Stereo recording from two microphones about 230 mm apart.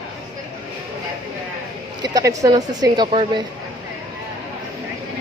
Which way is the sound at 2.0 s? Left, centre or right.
Centre.